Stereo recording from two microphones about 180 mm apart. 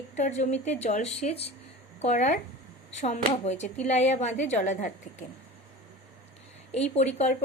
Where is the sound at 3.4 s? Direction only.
35° left (ahead or behind).